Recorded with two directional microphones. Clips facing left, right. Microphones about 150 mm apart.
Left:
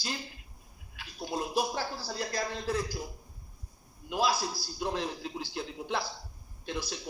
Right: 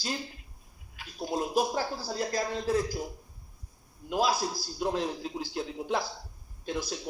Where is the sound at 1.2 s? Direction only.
45° right (ahead or behind).